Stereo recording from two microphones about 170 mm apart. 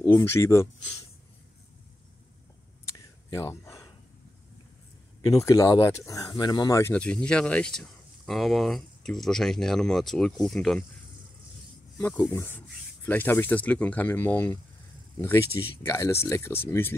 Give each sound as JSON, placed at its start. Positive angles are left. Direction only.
{"t": 0.0, "sound": "speech", "side_deg": 15}
{"t": 2.8, "sound": "a sound", "side_deg": 15}
{"t": 5.3, "sound": "speech", "side_deg": 20}
{"t": 12.0, "sound": "speech", "side_deg": 10}